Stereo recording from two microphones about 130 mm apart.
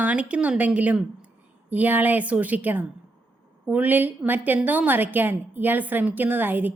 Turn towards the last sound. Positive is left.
turn(degrees=-15)  # may be behind; listen again after turning